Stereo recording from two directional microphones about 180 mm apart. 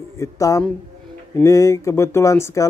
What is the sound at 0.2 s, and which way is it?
Speech, 15° left (ahead or behind).